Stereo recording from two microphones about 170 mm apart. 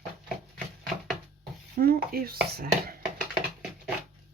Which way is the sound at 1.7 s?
60° right (ahead or behind).